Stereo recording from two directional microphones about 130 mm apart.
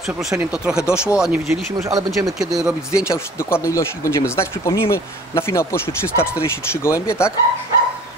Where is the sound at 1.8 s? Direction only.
25° right (ahead or behind).